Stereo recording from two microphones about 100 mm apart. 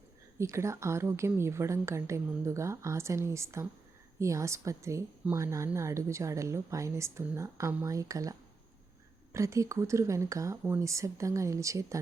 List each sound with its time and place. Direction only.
0.3 s a woman's voice: 30° right (ahead or behind)